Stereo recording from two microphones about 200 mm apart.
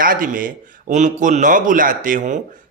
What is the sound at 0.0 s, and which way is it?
A man's voice, 45° right (ahead or behind).